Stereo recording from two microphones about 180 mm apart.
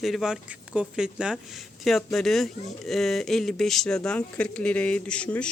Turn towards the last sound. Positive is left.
turn(degrees=5)  # may be behind; listen again after turning